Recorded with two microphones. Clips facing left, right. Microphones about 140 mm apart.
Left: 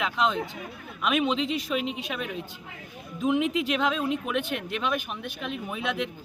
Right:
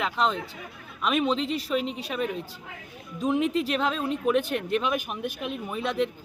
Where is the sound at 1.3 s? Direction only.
35° right (ahead or behind).